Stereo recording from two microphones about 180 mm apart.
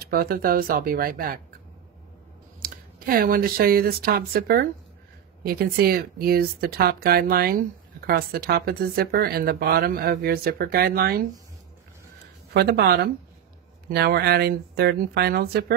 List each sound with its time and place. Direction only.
0.0 s speech: 55° right (ahead or behind)
2.6 s speech: 55° right (ahead or behind)
12.5 s speech: 65° right (ahead or behind)